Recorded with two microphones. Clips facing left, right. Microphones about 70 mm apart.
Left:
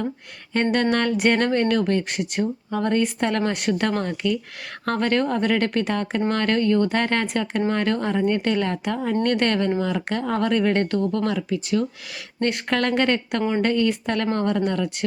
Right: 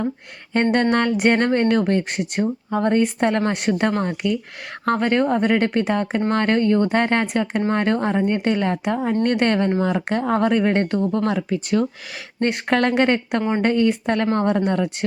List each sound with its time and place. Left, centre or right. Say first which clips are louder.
0.5 s speech: right 3 dB; right
11.4 s speech: right 3 dB; right
12.4 s speech: right 3 dB; right